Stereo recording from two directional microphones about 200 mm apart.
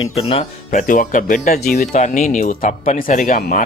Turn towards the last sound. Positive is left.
turn(degrees=45)  # may be behind; listen again after turning